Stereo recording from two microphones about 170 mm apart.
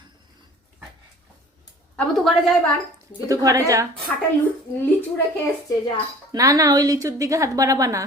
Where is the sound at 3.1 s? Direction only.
20° right (ahead or behind).